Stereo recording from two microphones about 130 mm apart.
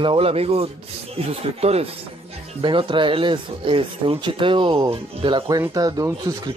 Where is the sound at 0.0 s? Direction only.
45° right (ahead or behind).